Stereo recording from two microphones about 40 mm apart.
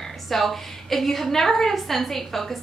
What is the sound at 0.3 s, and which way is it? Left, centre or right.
A woman's voice, centre.